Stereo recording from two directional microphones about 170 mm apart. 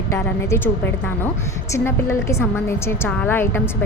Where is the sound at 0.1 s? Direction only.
15° left (ahead or behind).